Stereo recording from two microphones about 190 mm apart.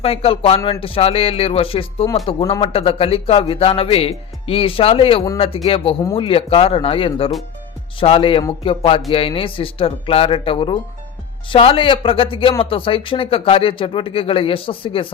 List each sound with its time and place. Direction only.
0.0 s a man's voice: 30° left (ahead or behind)